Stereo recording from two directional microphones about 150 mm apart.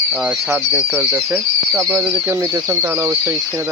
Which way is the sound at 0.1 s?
5° right (ahead or behind).